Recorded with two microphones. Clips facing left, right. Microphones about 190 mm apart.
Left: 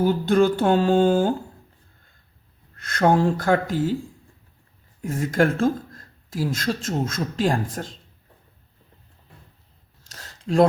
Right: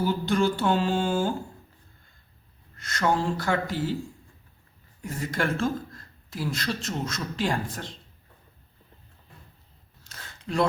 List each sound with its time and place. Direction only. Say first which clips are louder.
0.0 s speech: left 6 dB; 55° left (ahead or behind)
2.7 s speech: left 6 dB; 55° left (ahead or behind)
5.0 s speech: left 8 dB; 50° left (ahead or behind)
10.1 s a sound: left 7 dB; 40° left (ahead or behind)